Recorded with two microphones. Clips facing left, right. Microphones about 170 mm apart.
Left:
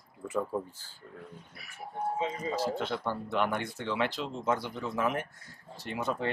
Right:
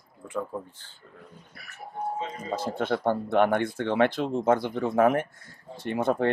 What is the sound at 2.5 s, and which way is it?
Speech, 55° right (ahead or behind).